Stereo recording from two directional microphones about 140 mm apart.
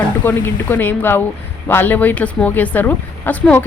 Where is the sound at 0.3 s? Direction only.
15° left (ahead or behind).